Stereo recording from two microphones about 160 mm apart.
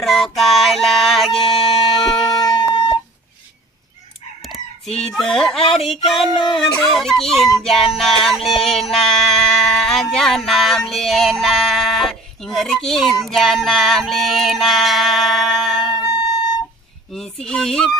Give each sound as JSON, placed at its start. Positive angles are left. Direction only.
{"t": 0.0, "sound": "yodeling", "side_deg": 0}
{"t": 2.4, "sound": "a sound", "side_deg": 30}
{"t": 4.4, "sound": "chicken", "side_deg": 0}
{"t": 5.9, "sound": "music", "side_deg": 0}
{"t": 17.1, "sound": "music", "side_deg": 5}